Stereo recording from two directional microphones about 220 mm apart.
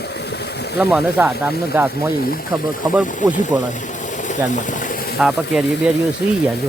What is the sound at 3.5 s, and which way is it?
Speech, 15° right (ahead or behind).